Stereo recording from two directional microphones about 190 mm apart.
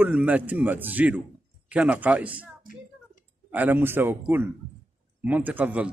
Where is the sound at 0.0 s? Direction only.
10° right (ahead or behind).